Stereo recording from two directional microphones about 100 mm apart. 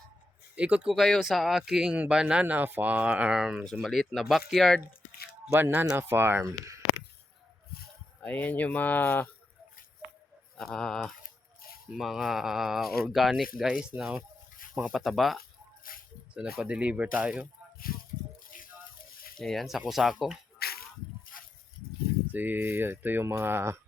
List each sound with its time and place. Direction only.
0.5 s speech: 10° right (ahead or behind)
5.5 s speech: 20° right (ahead or behind)
8.2 s speech: 15° left (ahead or behind)
10.6 s speech: 5° left (ahead or behind)
19.4 s speech: 5° left (ahead or behind)
22.3 s speech: 20° right (ahead or behind)